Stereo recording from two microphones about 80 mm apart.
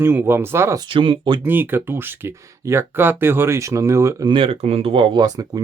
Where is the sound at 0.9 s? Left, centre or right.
Right.